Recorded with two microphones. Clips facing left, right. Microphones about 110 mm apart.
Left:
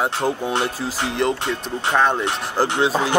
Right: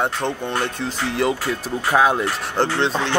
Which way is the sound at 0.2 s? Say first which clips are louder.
Left 2 dB; 20° left (ahead or behind).